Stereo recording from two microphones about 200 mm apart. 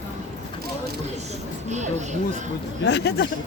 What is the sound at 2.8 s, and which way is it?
Speech, 60° left (ahead or behind).